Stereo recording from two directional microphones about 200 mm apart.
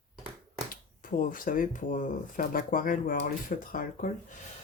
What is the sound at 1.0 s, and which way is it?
Speech, 45° left (ahead or behind).